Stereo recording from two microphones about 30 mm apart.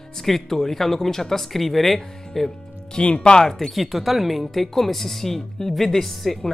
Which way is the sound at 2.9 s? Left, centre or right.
Left.